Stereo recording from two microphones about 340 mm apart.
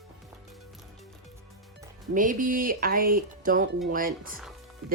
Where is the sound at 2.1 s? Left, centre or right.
Right.